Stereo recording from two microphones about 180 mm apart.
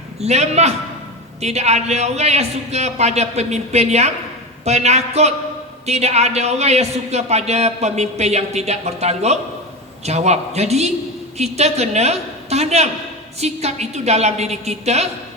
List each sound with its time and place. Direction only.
0.2 s speech: 40° right (ahead or behind)